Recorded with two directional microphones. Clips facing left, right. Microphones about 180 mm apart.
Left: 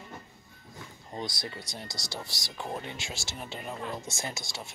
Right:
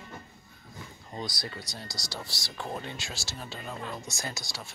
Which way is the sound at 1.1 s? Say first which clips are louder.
Even; 20° left (ahead or behind).